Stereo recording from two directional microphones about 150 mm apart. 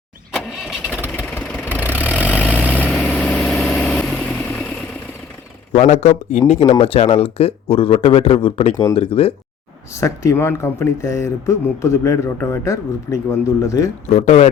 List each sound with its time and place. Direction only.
0.3 s vehicle: centre (ahead or behind)
5.7 s speech: 50° left (ahead or behind)
9.9 s speech: 20° left (ahead or behind)
14.2 s speech: 45° left (ahead or behind)